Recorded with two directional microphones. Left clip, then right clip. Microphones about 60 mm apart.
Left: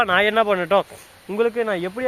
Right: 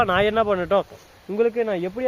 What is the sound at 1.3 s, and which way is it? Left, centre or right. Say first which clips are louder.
Speech: left 1 dB; right.